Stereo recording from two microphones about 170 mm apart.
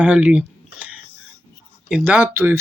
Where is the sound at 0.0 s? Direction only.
10° right (ahead or behind).